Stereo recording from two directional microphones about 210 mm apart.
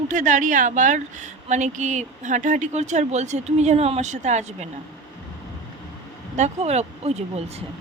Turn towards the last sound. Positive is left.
turn(degrees=-30)  # may be behind; listen again after turning